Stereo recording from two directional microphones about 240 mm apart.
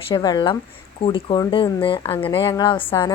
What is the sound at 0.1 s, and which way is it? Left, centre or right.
A woman's voice, centre.